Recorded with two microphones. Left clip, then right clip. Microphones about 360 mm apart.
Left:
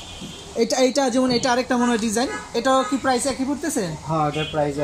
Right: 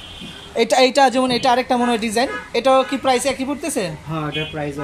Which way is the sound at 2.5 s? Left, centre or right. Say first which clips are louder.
Right 4 dB; centre.